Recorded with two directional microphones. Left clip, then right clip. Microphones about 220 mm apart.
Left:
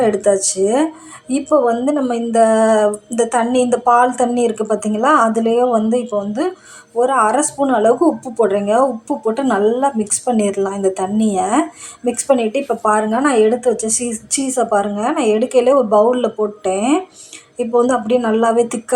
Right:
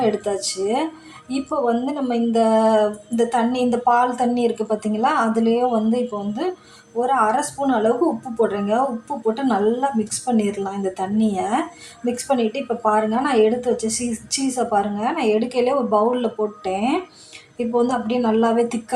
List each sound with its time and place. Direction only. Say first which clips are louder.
0.0 s a woman's voice: left 7 dB; 20° left (ahead or behind)